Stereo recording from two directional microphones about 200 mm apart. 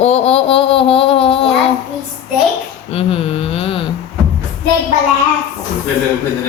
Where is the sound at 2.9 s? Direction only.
30° left (ahead or behind).